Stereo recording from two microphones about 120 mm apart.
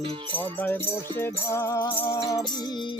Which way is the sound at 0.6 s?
15° left (ahead or behind).